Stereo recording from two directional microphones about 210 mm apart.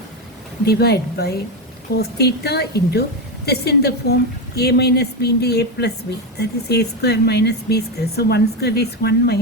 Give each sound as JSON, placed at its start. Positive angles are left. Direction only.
{"t": 0.6, "sound": "speech", "side_deg": 50}